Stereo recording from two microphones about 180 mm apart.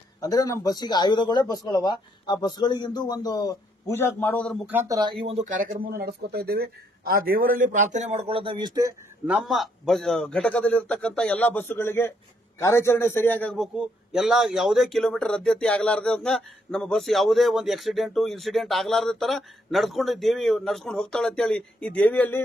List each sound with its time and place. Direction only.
0.2 s speech: 20° left (ahead or behind)
4.6 s speech: 15° right (ahead or behind)
9.3 s a man's voice: centre (ahead or behind)